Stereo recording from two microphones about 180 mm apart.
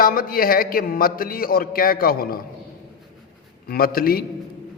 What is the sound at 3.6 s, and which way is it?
Speech, 55° left (ahead or behind).